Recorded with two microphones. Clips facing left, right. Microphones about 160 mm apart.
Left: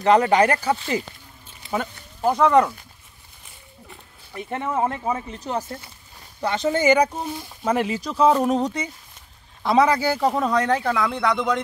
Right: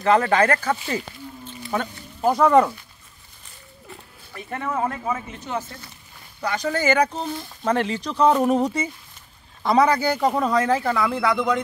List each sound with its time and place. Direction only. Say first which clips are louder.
0.0 s speech: left 2 dB; 20° left (ahead or behind)
2.2 s speech: right 1 dB; 5° right (ahead or behind)
4.3 s speech: left 2 dB; 20° left (ahead or behind); by 11.6 s centre (ahead or behind)